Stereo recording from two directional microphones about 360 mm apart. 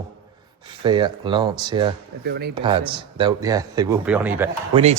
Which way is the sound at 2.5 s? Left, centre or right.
Centre.